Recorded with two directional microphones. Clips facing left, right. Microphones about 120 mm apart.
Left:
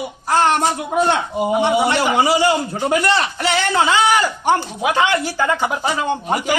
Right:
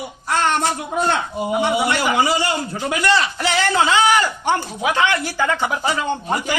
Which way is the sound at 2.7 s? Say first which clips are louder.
Left 2 dB; 40° left (ahead or behind).